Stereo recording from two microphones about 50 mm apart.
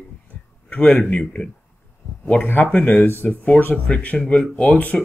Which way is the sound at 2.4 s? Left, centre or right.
Left.